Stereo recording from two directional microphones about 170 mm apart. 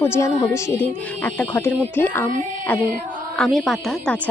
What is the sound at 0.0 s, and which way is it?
A woman's voice, 15° left (ahead or behind).